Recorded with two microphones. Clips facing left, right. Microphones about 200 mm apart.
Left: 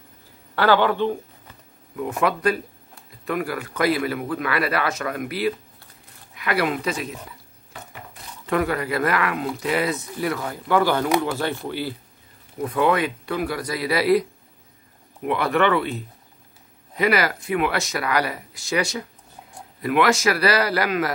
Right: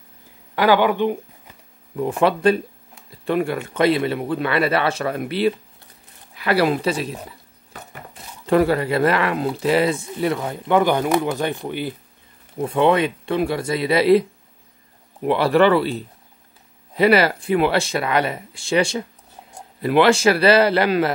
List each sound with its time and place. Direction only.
0.6 s speech: 15° right (ahead or behind)
2.0 s speech: 30° right (ahead or behind)
15.2 s a man's voice: 30° right (ahead or behind)